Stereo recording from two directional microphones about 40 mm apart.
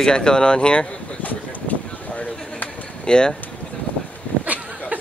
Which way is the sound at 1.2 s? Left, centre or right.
Left.